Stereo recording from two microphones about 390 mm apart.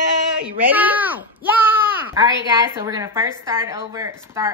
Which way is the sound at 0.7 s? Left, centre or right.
Centre.